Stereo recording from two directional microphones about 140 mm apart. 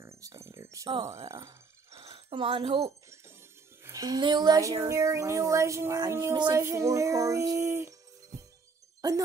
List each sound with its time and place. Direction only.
0.0 s speech: 20° right (ahead or behind)
2.0 s speech: 40° right (ahead or behind); by 6.3 s 20° right (ahead or behind)
6.3 s music: 35° right (ahead or behind)
6.6 s speech: 20° right (ahead or behind)